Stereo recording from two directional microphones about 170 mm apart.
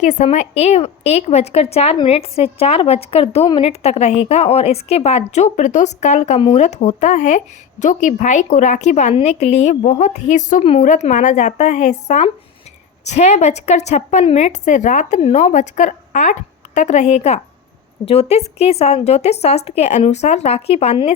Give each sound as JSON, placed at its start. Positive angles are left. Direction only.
{"t": 0.0, "sound": "a woman's voice", "side_deg": 45}